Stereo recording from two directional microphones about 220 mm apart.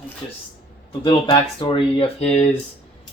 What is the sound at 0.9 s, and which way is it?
Speech, 20° left (ahead or behind).